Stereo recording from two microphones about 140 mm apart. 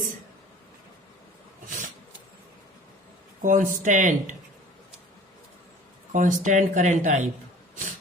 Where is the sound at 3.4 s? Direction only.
70° right (ahead or behind).